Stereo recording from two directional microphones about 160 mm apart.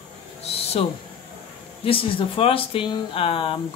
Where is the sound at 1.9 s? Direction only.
35° left (ahead or behind).